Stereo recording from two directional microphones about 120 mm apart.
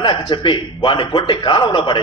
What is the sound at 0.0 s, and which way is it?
A man's voice, 40° left (ahead or behind).